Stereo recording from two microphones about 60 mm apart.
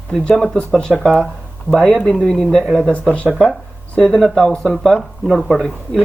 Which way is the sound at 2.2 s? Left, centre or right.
Centre.